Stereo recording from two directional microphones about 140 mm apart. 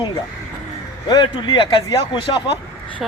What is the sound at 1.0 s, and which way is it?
Speech, 30° left (ahead or behind).